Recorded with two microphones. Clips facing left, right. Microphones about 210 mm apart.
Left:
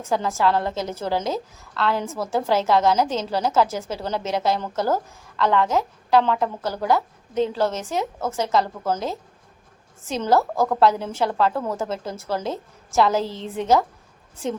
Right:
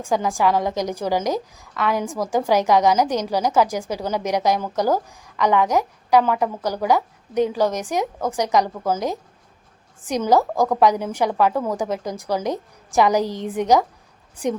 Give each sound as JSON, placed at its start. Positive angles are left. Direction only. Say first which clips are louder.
{"t": 0.0, "sound": "a woman's voice", "louder": "right 2 dB", "side_deg": -15}